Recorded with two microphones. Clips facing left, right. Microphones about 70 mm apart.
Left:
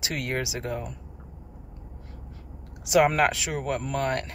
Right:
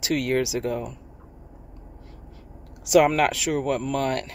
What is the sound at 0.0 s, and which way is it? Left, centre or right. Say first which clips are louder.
Speech: right 7 dB; left.